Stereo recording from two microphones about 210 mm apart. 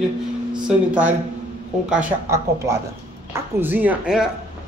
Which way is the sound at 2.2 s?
15° right (ahead or behind).